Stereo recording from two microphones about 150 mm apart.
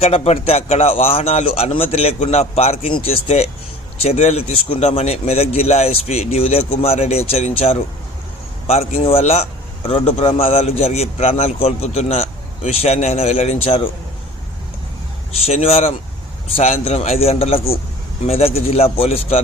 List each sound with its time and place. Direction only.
0.0 s a man's voice: 40° left (ahead or behind)
15.3 s a man's voice: 45° left (ahead or behind)